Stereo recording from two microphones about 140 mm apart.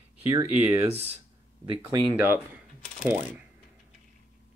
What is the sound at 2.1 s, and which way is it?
Speech, 15° right (ahead or behind).